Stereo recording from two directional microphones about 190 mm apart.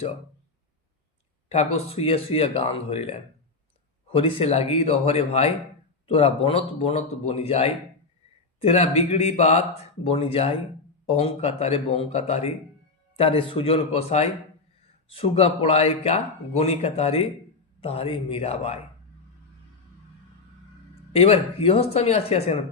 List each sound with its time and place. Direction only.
1.5 s a man's voice: 35° left (ahead or behind)
21.1 s a man's voice: 30° left (ahead or behind)